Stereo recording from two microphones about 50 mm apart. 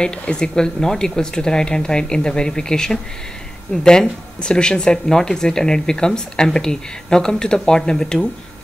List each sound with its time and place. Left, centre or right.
0.0 s speech: centre